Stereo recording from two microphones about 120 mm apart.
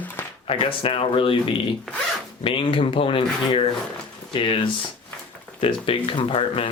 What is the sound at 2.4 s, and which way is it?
Speech, 45° left (ahead or behind).